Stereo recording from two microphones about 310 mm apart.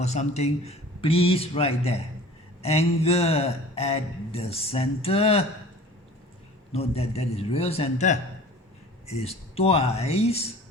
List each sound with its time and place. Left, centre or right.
0.0 s speech: left
6.7 s speech: centre